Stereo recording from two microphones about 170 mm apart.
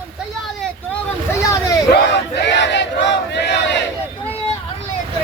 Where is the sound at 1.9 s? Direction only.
85° left.